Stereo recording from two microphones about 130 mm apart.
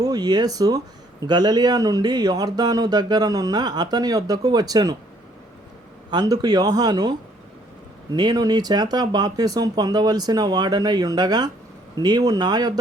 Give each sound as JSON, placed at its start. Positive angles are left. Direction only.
{"t": 0.0, "sound": "speech", "side_deg": -30}
{"t": 6.1, "sound": "speech", "side_deg": -30}